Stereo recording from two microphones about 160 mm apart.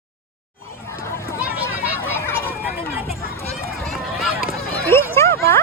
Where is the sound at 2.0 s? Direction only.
15° left (ahead or behind).